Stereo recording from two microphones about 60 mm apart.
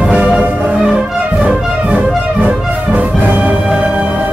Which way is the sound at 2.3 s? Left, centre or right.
Right.